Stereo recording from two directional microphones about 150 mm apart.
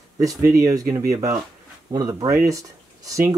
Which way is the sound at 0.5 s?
20° right (ahead or behind).